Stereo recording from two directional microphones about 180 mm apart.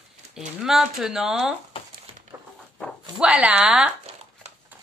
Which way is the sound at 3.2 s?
5° right (ahead or behind).